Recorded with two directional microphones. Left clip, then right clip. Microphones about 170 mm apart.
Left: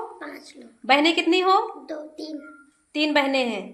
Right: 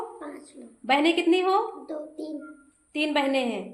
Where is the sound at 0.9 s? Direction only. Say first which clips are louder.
Left 3 dB; 20° left (ahead or behind).